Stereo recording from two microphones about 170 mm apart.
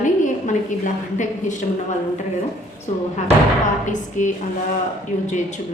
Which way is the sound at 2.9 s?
45° left (ahead or behind).